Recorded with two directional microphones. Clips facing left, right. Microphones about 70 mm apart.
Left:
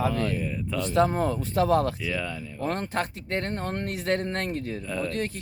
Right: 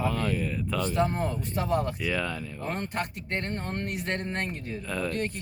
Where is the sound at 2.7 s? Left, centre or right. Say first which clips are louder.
Left 3 dB; left.